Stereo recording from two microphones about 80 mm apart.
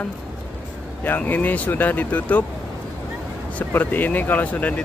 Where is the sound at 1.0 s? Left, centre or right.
Left.